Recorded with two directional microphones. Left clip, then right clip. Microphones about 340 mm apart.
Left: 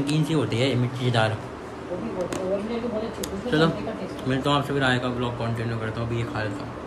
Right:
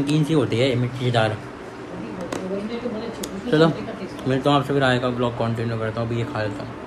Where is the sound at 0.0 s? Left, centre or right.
Centre.